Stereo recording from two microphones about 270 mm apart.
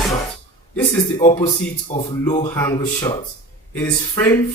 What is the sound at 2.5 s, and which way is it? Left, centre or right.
Speech, centre.